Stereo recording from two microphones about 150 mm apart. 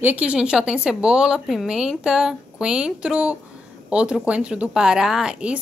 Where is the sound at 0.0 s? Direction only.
10° right (ahead or behind).